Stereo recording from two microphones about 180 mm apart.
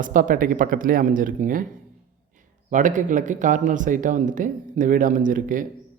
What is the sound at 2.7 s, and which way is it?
Speech, 45° right (ahead or behind).